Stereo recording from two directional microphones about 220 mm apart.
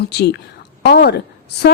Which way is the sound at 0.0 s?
50° left (ahead or behind).